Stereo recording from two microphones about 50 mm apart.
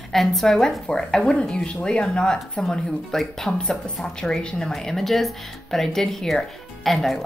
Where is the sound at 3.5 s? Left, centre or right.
Centre.